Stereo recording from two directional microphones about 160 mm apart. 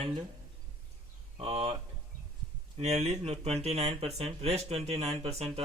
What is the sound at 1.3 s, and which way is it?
Speech, 30° right (ahead or behind).